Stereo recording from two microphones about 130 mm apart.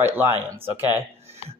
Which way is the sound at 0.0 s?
15° right (ahead or behind).